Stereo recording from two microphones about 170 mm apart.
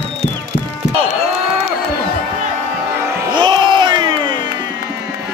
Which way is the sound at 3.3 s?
25° right (ahead or behind).